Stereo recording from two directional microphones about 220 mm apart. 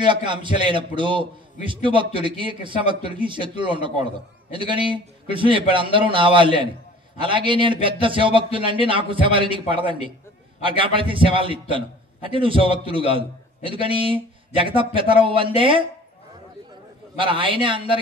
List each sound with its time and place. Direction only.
0.0 s speech: 20° right (ahead or behind)
17.2 s speech: 25° right (ahead or behind)